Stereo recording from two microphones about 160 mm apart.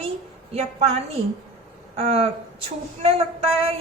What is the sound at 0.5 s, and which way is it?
Speech, 40° right (ahead or behind).